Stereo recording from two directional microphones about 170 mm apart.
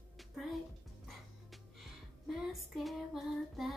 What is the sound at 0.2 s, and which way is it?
Music, centre (ahead or behind).